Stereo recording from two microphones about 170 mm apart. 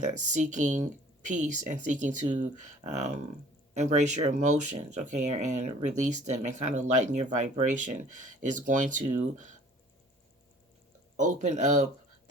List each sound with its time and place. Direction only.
0.0 s speech: 45° right (ahead or behind)
11.2 s speech: 50° right (ahead or behind)